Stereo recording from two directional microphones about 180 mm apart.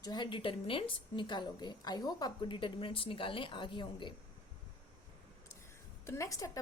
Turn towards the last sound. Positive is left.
turn(degrees=20)  # may be behind; listen again after turning